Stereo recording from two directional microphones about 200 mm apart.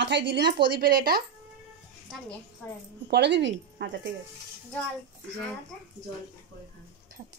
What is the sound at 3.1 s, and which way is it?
A woman's voice, 60° right (ahead or behind).